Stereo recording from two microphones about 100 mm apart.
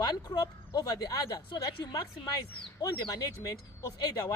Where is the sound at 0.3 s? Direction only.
40° left (ahead or behind).